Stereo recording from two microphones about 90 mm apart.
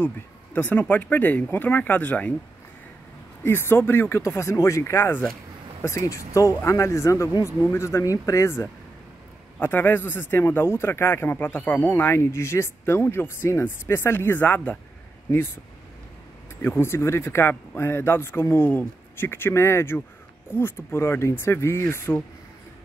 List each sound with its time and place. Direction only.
0.0 s speech: 20° left (ahead or behind)
3.4 s speech: 25° left (ahead or behind)
16.6 s speech: 25° left (ahead or behind)